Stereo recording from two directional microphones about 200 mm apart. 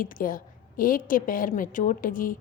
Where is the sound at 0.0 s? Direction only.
45° left (ahead or behind).